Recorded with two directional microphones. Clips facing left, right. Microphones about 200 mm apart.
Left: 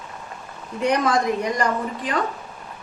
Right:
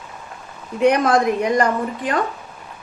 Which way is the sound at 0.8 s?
55° right (ahead or behind).